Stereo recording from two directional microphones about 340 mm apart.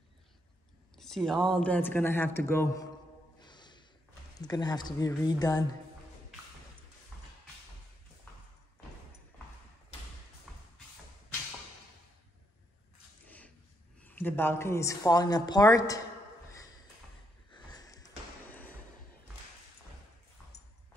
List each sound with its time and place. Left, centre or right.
0.9 s speech: centre
3.3 s snort: centre
4.4 s a woman's voice: centre
14.0 s a woman's voice: centre
17.5 s snort: centre